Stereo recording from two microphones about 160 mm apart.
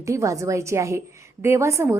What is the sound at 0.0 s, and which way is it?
A woman's voice, 20° right (ahead or behind).